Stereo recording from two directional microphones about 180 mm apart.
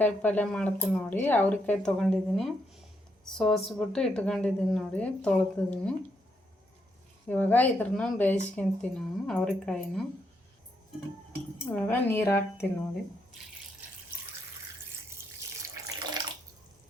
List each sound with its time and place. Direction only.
0.0 s speech: 10° left (ahead or behind)
7.3 s speech: 10° left (ahead or behind)
11.6 s speech: 10° left (ahead or behind)
15.5 s water tap: 15° right (ahead or behind)